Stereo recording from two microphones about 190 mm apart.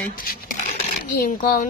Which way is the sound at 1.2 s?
45° left (ahead or behind).